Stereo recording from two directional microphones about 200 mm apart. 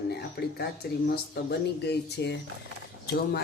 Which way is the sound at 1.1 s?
55° left (ahead or behind).